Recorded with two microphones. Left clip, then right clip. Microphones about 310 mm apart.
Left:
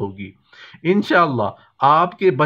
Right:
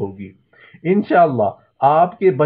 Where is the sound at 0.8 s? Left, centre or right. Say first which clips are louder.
Right 2 dB; left.